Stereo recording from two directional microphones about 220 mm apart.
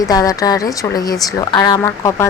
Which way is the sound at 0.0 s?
15° left (ahead or behind).